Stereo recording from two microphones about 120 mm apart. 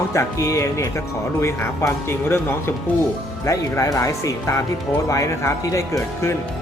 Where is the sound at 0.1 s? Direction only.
25° left (ahead or behind).